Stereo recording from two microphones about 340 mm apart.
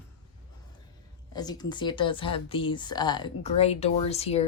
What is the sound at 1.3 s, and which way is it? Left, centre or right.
Speech, centre.